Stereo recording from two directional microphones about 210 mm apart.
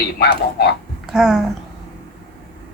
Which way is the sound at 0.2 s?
50° left (ahead or behind).